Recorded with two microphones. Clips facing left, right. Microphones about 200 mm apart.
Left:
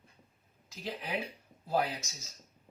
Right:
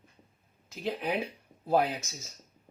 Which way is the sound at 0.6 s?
55° right (ahead or behind).